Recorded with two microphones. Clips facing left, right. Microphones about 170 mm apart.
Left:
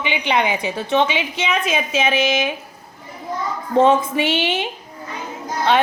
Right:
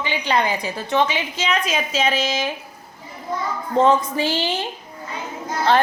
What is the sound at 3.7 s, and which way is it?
A woman's voice, 25° left (ahead or behind).